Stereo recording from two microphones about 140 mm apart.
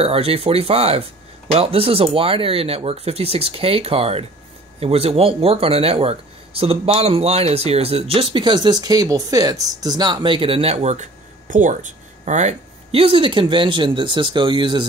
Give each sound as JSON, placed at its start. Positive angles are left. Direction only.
{"t": 0.0, "sound": "speech", "side_deg": -45}
{"t": 13.0, "sound": "speech", "side_deg": -35}